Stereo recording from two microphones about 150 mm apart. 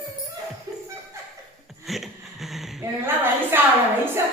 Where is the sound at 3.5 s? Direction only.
15° right (ahead or behind).